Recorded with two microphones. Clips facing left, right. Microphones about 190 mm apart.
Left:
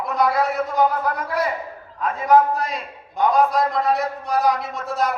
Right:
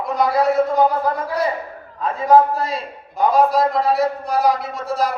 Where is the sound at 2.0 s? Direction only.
30° right (ahead or behind).